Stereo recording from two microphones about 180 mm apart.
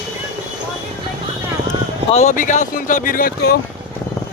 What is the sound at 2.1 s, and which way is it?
Speech, 45° left (ahead or behind).